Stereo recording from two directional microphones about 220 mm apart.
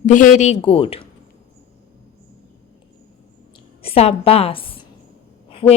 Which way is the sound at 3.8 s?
25° left (ahead or behind).